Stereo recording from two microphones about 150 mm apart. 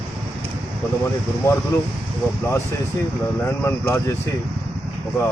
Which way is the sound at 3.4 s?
15° left (ahead or behind).